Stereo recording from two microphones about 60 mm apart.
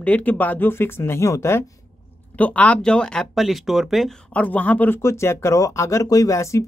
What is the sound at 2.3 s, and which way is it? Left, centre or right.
Speech, left.